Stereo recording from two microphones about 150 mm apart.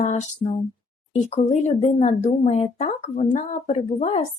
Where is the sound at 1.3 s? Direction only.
45° left (ahead or behind).